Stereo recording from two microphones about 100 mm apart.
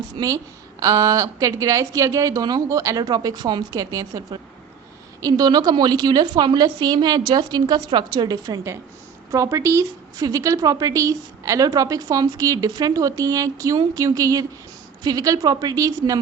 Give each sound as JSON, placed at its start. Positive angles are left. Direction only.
{"t": 0.2, "sound": "a woman's voice", "side_deg": -45}